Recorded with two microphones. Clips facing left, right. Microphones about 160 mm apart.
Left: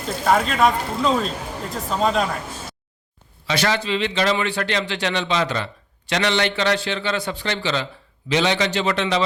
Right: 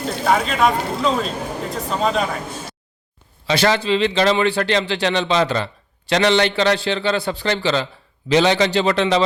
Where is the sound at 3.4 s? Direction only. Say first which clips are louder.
Right 4 dB; 30° right (ahead or behind).